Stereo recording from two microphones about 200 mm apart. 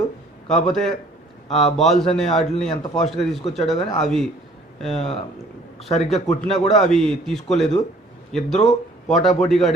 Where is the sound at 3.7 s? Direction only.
20° left (ahead or behind).